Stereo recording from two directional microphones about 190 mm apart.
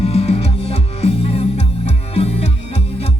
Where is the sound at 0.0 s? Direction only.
30° left (ahead or behind).